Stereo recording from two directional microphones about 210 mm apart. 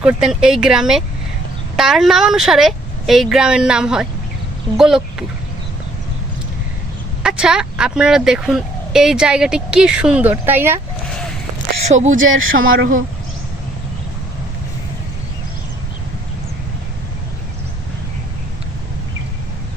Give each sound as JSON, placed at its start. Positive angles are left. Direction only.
{"t": 0.0, "sound": "speech", "side_deg": -5}
{"t": 7.2, "sound": "speech", "side_deg": -5}
{"t": 11.9, "sound": "speech", "side_deg": -35}
{"t": 12.2, "sound": "speech", "side_deg": -70}